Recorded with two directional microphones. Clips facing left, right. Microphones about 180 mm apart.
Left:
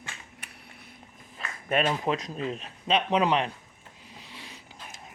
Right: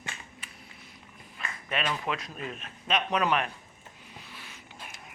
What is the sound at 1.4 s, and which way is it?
Speech, 40° left (ahead or behind).